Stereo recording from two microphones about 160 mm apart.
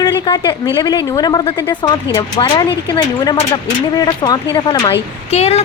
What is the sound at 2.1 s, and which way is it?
Speech, 30° left (ahead or behind).